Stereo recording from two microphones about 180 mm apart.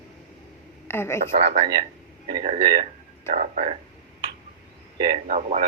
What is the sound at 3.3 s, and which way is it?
Speech, 35° right (ahead or behind).